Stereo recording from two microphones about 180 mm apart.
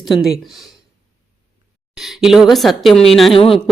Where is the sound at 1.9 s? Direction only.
Centre (ahead or behind).